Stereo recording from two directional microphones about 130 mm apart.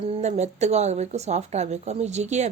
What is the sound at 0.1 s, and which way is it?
A woman's voice, 60° right (ahead or behind).